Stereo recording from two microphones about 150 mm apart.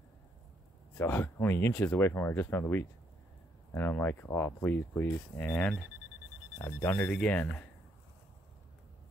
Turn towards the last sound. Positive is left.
turn(degrees=10)  # may be behind; listen again after turning